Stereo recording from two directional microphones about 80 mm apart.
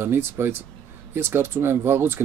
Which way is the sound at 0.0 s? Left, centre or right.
Right.